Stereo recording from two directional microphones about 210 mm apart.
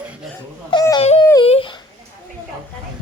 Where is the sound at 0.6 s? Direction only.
20° left (ahead or behind).